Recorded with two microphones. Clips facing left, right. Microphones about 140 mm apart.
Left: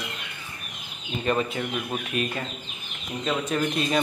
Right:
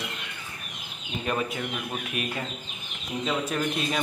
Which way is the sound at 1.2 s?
5° right (ahead or behind).